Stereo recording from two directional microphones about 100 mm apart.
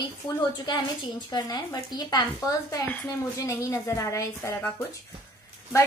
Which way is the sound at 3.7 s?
35° left (ahead or behind).